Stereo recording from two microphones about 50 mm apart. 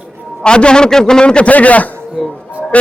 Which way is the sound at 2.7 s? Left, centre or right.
Left.